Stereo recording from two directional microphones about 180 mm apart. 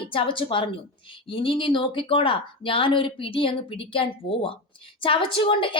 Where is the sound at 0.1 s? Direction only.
30° left (ahead or behind).